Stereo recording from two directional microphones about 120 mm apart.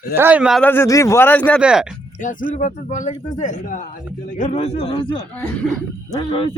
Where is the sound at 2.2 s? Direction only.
90° left.